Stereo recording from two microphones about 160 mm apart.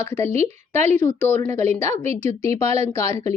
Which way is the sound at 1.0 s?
15° left (ahead or behind).